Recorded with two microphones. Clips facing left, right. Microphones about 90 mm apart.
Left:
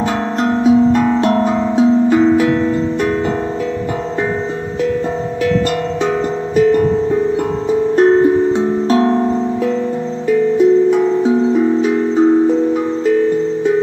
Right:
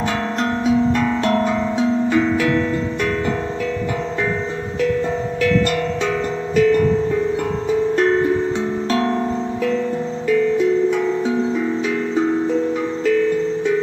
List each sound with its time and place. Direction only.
0.4 s music: 20° left (ahead or behind)
6.5 s music: 25° left (ahead or behind)